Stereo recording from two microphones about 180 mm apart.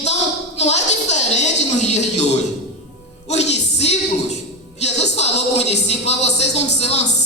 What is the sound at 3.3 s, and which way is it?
Music, 35° left (ahead or behind).